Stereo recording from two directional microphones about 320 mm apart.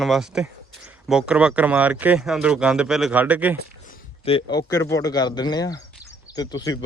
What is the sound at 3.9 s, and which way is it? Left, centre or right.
A man's voice, centre.